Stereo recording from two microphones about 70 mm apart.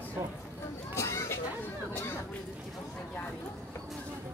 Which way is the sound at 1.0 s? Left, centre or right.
Left.